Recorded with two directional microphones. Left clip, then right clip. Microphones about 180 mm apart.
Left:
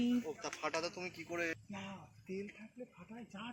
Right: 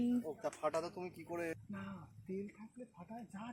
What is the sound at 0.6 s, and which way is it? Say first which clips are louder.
Speech: left 1 dB; 55° right (ahead or behind).